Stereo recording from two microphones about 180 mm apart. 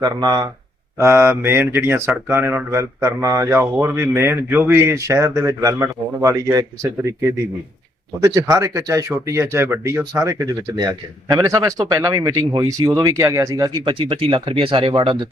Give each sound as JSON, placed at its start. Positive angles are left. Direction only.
{"t": 0.0, "sound": "speech", "side_deg": -20}